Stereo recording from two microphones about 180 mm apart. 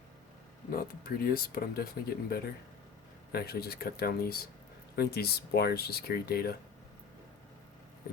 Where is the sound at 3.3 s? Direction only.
60° left (ahead or behind).